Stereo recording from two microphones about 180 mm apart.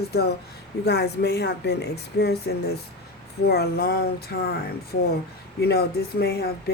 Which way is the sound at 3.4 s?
60° left (ahead or behind).